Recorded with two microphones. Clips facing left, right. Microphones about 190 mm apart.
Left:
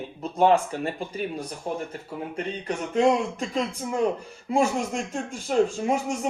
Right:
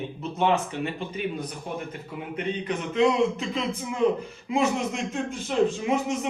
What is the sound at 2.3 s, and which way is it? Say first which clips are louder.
Speech: right 3 dB; 35° left (ahead or behind).